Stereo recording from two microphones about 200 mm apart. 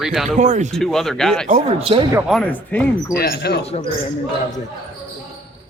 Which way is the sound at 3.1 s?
50° left (ahead or behind).